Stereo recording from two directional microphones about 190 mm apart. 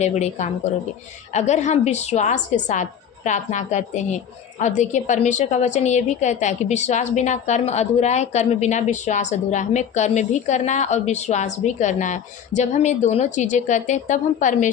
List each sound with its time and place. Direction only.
0.0 s a woman's voice: 35° left (ahead or behind)